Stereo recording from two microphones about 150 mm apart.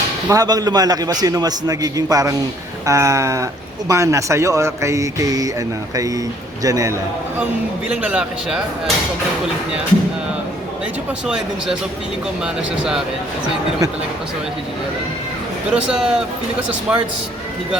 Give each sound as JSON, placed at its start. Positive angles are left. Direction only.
{"t": 0.3, "sound": "speech", "side_deg": -25}
{"t": 7.9, "sound": "a man's voice", "side_deg": -10}
{"t": 11.3, "sound": "speech", "side_deg": -5}
{"t": 15.7, "sound": "a man's voice", "side_deg": -5}